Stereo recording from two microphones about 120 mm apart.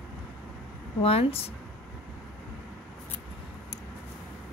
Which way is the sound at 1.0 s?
55° left (ahead or behind).